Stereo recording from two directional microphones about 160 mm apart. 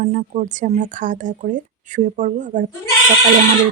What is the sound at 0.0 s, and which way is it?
Speech, 45° right (ahead or behind).